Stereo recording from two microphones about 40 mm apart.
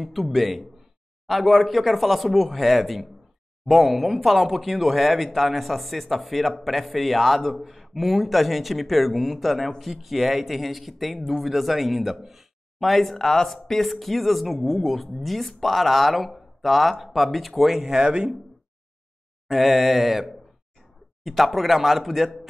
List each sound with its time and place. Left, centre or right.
0.0 s speech: centre
17.8 s speech: centre
19.4 s speech: centre